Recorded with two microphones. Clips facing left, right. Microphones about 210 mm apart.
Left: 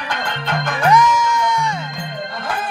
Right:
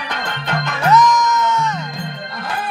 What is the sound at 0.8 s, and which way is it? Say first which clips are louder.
Music: right 1 dB; 10° left (ahead or behind).